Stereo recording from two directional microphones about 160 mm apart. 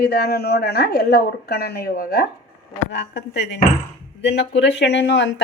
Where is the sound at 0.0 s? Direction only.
75° left (ahead or behind).